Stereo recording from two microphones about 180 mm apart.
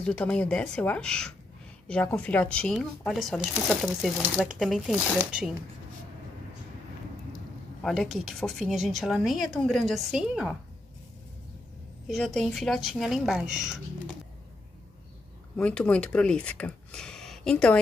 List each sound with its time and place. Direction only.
0.0 s speech: 5° left (ahead or behind)
7.8 s speech: centre (ahead or behind)
12.1 s speech: centre (ahead or behind)
15.5 s speech: 5° left (ahead or behind)